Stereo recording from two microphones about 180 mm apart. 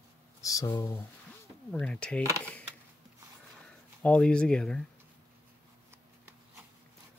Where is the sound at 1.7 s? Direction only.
5° left (ahead or behind).